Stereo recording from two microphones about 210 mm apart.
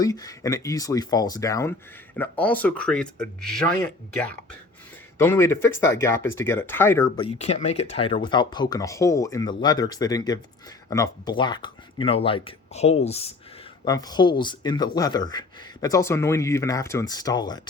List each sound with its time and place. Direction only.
0.0 s speech: 15° left (ahead or behind)
5.1 s speech: 10° left (ahead or behind)
7.2 s speech: 30° left (ahead or behind)
13.8 s speech: 15° left (ahead or behind)